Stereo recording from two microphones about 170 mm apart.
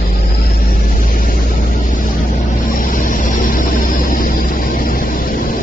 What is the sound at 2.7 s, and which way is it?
Vehicle, 55° left (ahead or behind).